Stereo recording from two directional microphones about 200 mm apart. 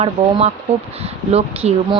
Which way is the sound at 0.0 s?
30° right (ahead or behind).